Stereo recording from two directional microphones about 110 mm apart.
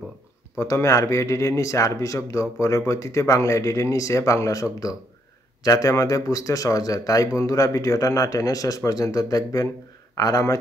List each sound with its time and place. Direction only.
0.6 s speech: 25° left (ahead or behind)